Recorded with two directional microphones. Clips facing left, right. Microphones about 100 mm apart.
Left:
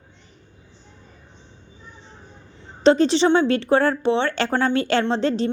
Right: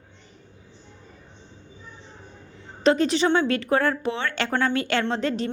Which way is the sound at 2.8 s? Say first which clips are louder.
Left 4 dB; 30° left (ahead or behind).